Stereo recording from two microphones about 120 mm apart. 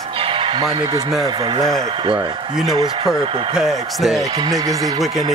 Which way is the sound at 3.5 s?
5° right (ahead or behind).